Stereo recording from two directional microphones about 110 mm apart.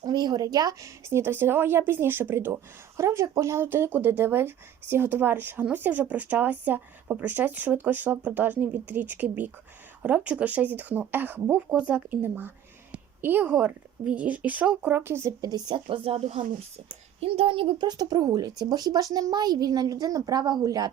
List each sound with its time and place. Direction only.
0.0 s a woman's voice: 40° right (ahead or behind); by 17.8 s 55° right (ahead or behind)
17.8 s a woman's voice: 40° right (ahead or behind)